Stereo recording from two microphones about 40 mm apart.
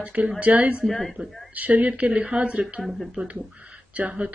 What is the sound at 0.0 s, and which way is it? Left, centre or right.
Speech, right.